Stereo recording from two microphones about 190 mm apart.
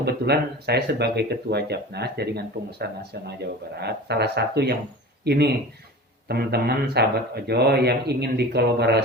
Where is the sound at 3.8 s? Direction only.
60° right (ahead or behind).